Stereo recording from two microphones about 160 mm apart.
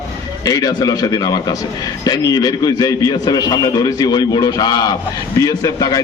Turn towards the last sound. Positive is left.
turn(degrees=25)  # may be behind; listen again after turning